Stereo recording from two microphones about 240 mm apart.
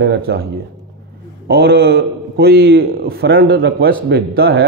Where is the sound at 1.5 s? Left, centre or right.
Right.